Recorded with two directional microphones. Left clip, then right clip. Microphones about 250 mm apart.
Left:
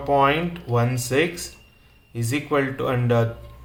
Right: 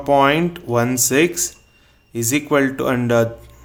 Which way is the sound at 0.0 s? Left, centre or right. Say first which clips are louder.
Right 4 dB; right.